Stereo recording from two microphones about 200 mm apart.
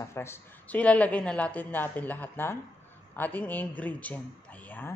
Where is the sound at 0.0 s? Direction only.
15° left (ahead or behind).